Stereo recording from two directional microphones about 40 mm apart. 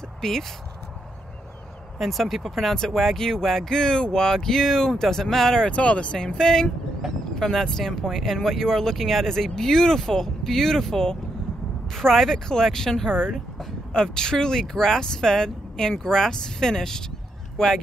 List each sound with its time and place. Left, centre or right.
0.2 s speech: centre
2.0 s speech: centre
5.6 s speech: left
6.1 s speech: centre